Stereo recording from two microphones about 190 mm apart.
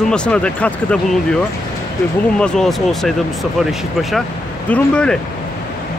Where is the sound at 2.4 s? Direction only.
Centre (ahead or behind).